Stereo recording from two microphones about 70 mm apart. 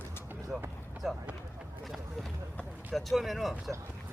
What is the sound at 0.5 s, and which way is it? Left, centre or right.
Speech, centre.